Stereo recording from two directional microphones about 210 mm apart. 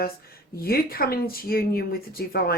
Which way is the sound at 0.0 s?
45° left (ahead or behind).